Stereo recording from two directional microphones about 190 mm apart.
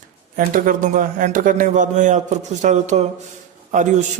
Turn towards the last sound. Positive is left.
turn(degrees=-40)  # may be behind; listen again after turning